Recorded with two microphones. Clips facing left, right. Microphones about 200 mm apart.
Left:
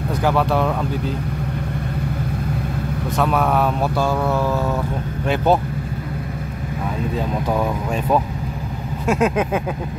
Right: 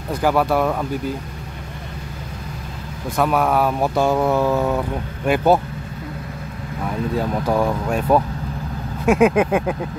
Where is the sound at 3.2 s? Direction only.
10° right (ahead or behind).